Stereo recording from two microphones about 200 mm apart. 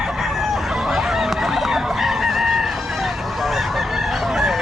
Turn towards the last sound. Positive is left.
turn(degrees=0)  # may be behind; listen again after turning